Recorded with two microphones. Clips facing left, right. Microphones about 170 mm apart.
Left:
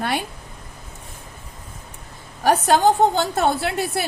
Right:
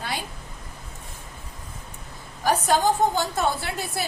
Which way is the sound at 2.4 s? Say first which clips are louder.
Left 5 dB; 65° left (ahead or behind).